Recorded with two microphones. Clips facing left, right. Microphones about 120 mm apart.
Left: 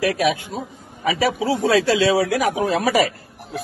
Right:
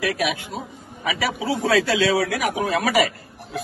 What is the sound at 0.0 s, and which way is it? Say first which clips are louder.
A man's voice: left 4 dB; 35° left (ahead or behind).